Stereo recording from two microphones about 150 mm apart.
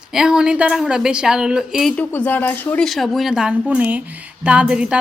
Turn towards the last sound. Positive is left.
turn(degrees=-5)  # may be behind; listen again after turning